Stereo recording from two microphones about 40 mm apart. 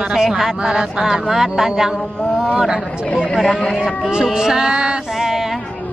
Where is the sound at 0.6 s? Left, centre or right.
Centre.